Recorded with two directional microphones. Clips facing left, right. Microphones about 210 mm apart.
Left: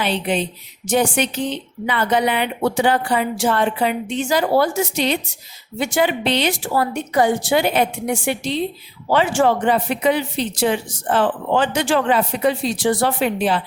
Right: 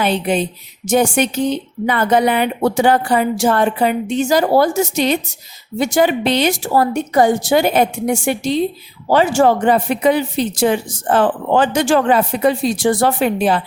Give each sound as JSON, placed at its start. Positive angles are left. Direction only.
{"t": 0.0, "sound": "a woman's voice", "side_deg": -45}